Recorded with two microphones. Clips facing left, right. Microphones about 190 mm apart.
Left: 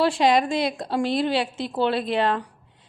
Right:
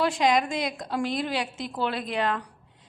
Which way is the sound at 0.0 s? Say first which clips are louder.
Left 4 dB; 30° left (ahead or behind).